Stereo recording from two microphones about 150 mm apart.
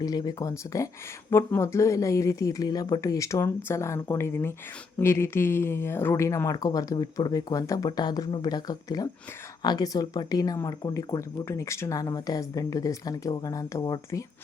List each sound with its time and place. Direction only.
0.0 s speech: 25° left (ahead or behind)